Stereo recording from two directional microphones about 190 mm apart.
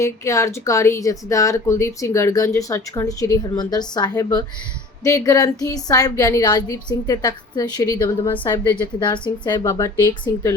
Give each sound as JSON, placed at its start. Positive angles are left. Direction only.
{"t": 0.0, "sound": "a woman's voice", "side_deg": 15}